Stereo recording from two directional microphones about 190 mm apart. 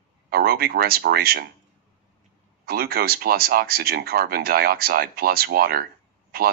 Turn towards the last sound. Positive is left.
turn(degrees=-55)  # may be behind; listen again after turning